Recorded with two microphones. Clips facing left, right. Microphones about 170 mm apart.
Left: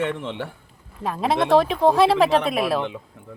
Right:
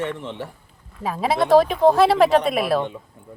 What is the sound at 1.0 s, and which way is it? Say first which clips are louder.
Speech: right 1 dB; 5° right (ahead or behind).